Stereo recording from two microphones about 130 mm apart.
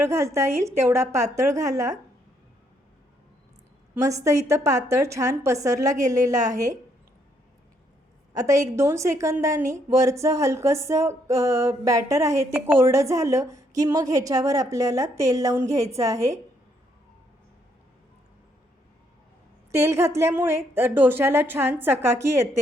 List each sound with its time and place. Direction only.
0.0 s a woman's voice: 20° right (ahead or behind)
4.0 s a woman's voice: 25° right (ahead or behind)
8.3 s a woman's voice: 25° right (ahead or behind)
19.7 s a woman's voice: 20° right (ahead or behind)